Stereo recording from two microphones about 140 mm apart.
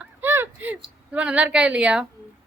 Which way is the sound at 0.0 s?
15° right (ahead or behind).